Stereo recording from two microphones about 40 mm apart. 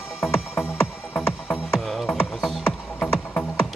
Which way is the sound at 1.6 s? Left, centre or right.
Centre.